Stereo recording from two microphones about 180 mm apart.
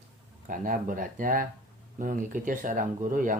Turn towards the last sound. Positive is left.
turn(degrees=-50)  # may be behind; listen again after turning